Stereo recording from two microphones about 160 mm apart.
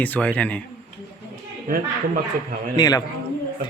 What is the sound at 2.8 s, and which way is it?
Speech, 25° left (ahead or behind).